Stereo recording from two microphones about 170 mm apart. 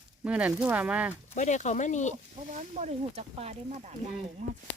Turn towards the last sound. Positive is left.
turn(degrees=-50)  # may be behind; listen again after turning